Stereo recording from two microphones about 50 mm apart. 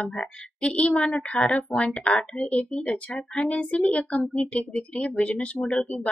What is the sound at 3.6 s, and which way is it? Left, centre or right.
Speech, left.